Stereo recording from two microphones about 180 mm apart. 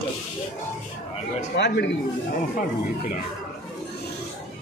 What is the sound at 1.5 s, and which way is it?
Speech, 75° left (ahead or behind).